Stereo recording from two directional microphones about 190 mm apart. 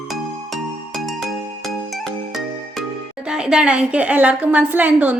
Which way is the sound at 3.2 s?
5° right (ahead or behind).